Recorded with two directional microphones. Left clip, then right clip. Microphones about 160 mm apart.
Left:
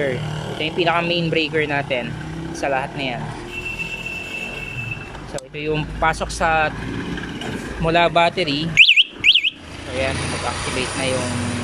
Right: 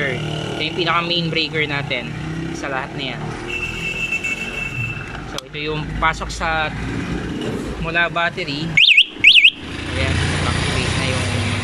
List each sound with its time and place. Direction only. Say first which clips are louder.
0.0 s speech: right 1 dB; 5° left (ahead or behind)
5.7 s speech: even; 10° left (ahead or behind)
7.8 s speech: left 3 dB; 20° left (ahead or behind)
8.8 s a sound: right 4 dB; centre (ahead or behind)